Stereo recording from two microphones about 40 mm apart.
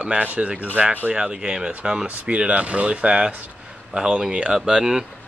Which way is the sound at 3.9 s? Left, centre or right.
Right.